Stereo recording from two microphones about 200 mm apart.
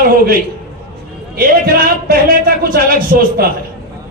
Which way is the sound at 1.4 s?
50° right (ahead or behind).